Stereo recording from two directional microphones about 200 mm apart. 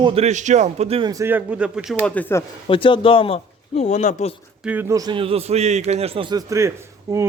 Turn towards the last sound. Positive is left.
turn(degrees=-15)  # may be behind; listen again after turning